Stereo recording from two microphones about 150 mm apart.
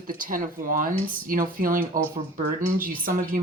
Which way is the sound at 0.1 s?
65° right (ahead or behind).